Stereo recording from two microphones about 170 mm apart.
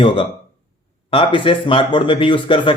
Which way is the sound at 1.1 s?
30° left (ahead or behind).